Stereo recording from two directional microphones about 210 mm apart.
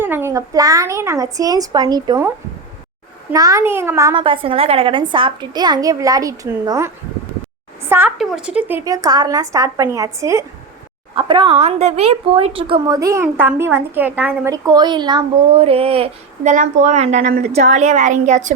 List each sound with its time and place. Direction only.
0.0 s a woman's voice: 10° right (ahead or behind)
3.3 s a woman's voice: 15° right (ahead or behind); by 18.5 s 35° right (ahead or behind)